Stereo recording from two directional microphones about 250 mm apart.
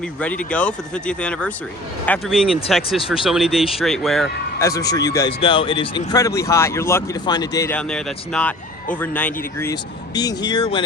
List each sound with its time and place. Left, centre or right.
0.2 s speech: centre
4.6 s speech: centre